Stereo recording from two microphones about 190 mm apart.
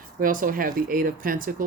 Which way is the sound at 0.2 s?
45° right (ahead or behind).